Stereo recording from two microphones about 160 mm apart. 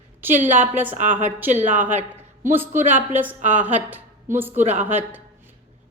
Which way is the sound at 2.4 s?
15° right (ahead or behind).